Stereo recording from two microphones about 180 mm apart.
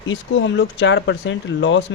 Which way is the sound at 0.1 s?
90° left.